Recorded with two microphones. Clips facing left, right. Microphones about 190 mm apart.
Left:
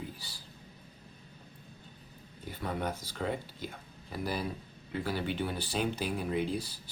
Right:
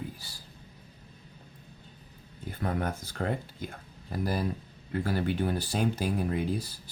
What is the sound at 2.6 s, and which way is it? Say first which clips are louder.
Speech: right 3 dB; 55° right (ahead or behind).